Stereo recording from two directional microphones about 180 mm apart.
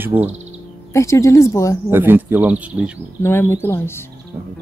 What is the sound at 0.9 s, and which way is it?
Speech, 15° left (ahead or behind).